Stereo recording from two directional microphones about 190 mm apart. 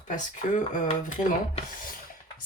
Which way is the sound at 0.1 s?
40° left (ahead or behind).